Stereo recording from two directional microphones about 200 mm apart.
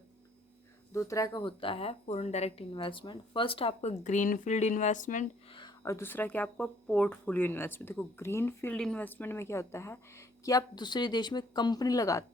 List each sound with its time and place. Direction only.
0.9 s speech: 15° left (ahead or behind); by 5.2 s 40° left (ahead or behind)
5.5 s speech: 25° left (ahead or behind)